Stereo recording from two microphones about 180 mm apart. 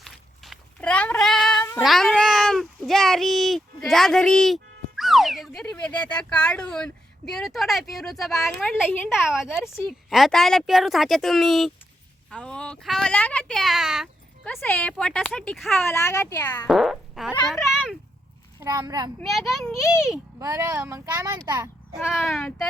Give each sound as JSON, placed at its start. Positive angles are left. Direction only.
{"t": 0.0, "sound": "a sound", "side_deg": 0}
{"t": 1.8, "sound": "cat", "side_deg": 0}
{"t": 5.7, "sound": "speech", "side_deg": 5}
{"t": 15.9, "sound": "a woman's voice", "side_deg": 15}
{"t": 16.6, "sound": "fart", "side_deg": 0}
{"t": 17.3, "sound": "speech", "side_deg": 0}
{"t": 18.6, "sound": "a woman's voice", "side_deg": -20}
{"t": 19.2, "sound": "speech", "side_deg": 0}
{"t": 20.4, "sound": "speech", "side_deg": -15}
{"t": 21.9, "sound": "speech", "side_deg": -5}